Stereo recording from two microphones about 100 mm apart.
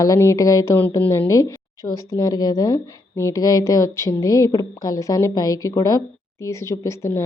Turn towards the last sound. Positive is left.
turn(degrees=25)  # may be behind; listen again after turning